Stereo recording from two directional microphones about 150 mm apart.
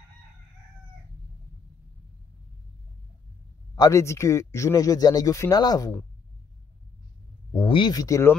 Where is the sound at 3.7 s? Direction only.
20° left (ahead or behind).